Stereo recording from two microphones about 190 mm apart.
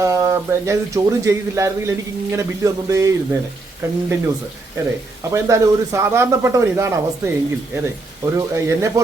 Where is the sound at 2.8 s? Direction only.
15° right (ahead or behind).